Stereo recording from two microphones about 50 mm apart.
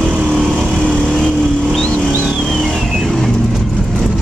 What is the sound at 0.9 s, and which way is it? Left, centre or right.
Vehicle, centre.